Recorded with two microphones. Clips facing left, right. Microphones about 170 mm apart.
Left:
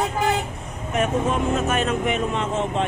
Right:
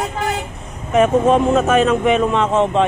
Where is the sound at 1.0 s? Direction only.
90° right.